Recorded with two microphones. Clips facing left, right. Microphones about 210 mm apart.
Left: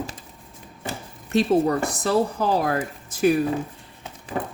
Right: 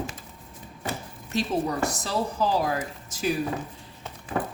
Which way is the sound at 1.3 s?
55° left (ahead or behind).